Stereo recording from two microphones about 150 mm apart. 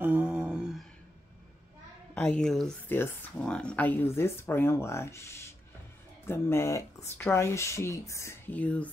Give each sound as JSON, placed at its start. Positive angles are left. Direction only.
{"t": 0.0, "sound": "a sound", "side_deg": -5}
{"t": 2.1, "sound": "a woman's voice", "side_deg": 5}
{"t": 2.9, "sound": "speech", "side_deg": 15}